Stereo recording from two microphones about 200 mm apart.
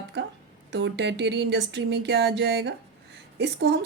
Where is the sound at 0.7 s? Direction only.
60° right (ahead or behind).